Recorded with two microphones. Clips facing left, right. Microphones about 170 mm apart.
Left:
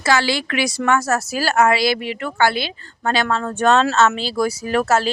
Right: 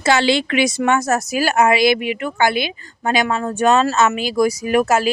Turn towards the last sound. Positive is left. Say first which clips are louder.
# right 2 dB
turn(degrees=-15)  # may be behind; listen again after turning